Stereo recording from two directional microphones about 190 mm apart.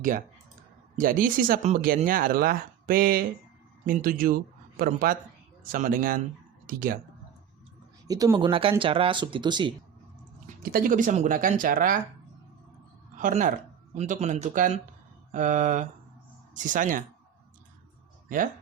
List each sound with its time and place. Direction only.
0.9 s speech: 45° right (ahead or behind)
8.0 s speech: 20° right (ahead or behind)
10.4 s speech: 50° right (ahead or behind)
13.1 s speech: 45° right (ahead or behind)